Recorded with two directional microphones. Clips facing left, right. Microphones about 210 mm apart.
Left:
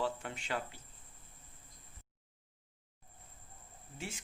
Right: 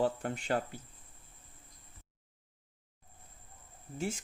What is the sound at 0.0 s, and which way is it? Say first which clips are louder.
Speech: right 6 dB; 45° right (ahead or behind).